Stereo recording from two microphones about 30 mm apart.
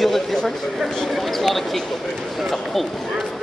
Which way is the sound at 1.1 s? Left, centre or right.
Centre.